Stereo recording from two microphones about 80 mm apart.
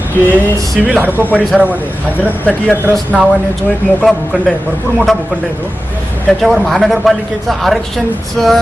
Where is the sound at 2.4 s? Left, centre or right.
Left.